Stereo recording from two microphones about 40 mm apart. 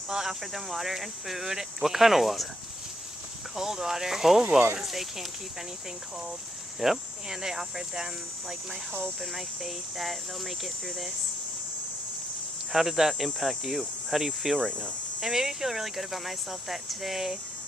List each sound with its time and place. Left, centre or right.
0.1 s speech: centre
3.5 s speech: centre
6.7 s speech: centre
12.7 s speech: centre
14.7 s speech: left
15.2 s speech: centre